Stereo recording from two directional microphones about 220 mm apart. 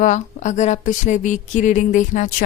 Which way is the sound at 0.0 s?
35° left (ahead or behind).